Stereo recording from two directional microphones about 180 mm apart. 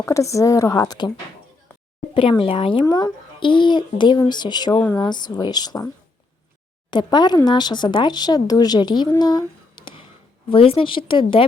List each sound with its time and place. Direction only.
0.0 s a woman's voice: 15° left (ahead or behind)
2.4 s speech: 30° left (ahead or behind)
6.9 s speech: 25° left (ahead or behind)
9.7 s basketball bounce: 30° left (ahead or behind)
10.5 s speech: 30° left (ahead or behind)